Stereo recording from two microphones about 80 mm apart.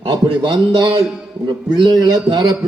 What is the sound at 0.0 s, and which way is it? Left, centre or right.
A man's voice, right.